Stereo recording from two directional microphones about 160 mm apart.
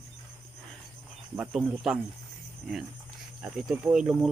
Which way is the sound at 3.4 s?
5° right (ahead or behind).